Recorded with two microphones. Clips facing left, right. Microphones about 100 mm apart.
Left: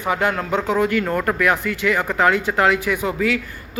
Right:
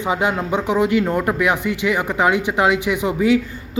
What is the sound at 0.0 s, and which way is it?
Speech, 15° right (ahead or behind).